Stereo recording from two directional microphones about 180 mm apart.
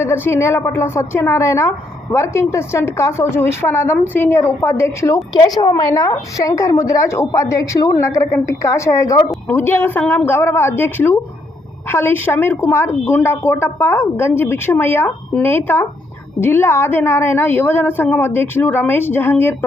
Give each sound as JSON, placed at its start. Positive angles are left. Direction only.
{"t": 0.0, "sound": "a woman's voice", "side_deg": 15}